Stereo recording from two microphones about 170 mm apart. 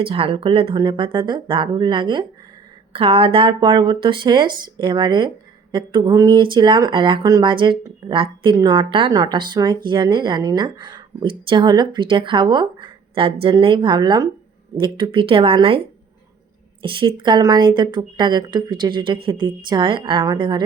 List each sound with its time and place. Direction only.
0.0 s speech: 35° right (ahead or behind)
16.8 s speech: 30° right (ahead or behind)